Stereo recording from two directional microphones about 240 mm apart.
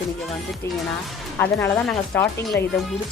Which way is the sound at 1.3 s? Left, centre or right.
Centre.